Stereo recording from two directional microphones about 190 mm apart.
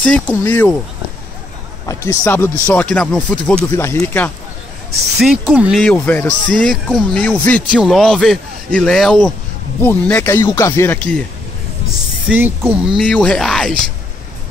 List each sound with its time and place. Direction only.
0.0 s speech: 10° left (ahead or behind)
1.9 s speech: 15° left (ahead or behind)
5.2 s speech: centre (ahead or behind)
12.3 s speech: 10° right (ahead or behind)